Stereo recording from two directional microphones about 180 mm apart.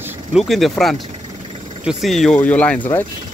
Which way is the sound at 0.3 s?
Centre (ahead or behind).